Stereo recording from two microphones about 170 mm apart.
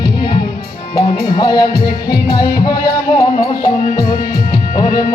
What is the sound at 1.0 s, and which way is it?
Music, 25° left (ahead or behind).